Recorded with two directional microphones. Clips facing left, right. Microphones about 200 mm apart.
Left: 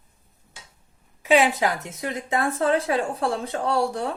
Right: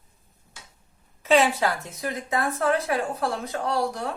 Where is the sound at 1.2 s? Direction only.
15° left (ahead or behind).